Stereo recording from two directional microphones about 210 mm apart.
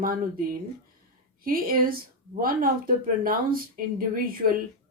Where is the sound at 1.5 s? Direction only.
45° right (ahead or behind).